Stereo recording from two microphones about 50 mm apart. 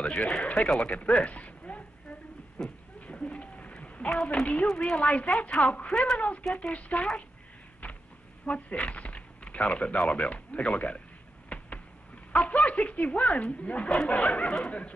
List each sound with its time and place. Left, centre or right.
0.4 s speech: left
0.7 s a sound: left
2.6 s speech: centre
3.1 s a sound: left
4.1 s speech: centre
5.0 s speech: left
5.9 s speech: centre
6.1 s speech: left
7.8 s a sound: left
8.5 s speech: left
11.4 s a sound: left
12.3 s speech: left